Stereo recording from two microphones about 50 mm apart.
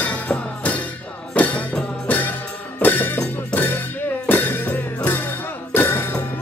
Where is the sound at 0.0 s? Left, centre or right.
Left.